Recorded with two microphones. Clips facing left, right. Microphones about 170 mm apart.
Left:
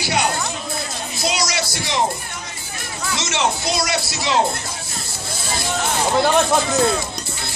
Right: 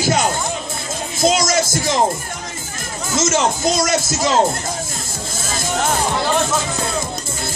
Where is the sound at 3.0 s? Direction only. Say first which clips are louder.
Right 4 dB; 45° right (ahead or behind).